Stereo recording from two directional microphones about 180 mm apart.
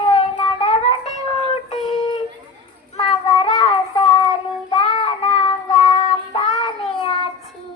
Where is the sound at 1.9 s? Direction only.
25° left (ahead or behind).